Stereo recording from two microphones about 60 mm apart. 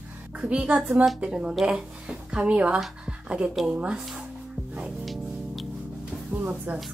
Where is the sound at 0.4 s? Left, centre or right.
Centre.